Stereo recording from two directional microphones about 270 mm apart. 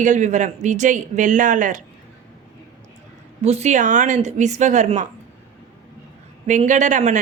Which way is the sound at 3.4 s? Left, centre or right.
Right.